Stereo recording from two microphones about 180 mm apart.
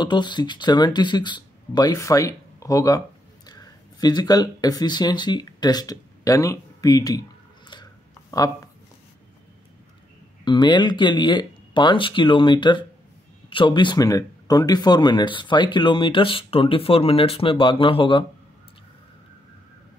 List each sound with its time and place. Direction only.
0.0 s speech: 25° left (ahead or behind)
10.4 s speech: 25° left (ahead or behind)